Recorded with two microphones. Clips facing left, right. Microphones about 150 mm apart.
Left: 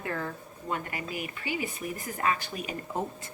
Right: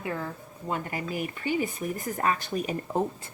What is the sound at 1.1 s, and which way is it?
A woman's voice, 40° right (ahead or behind).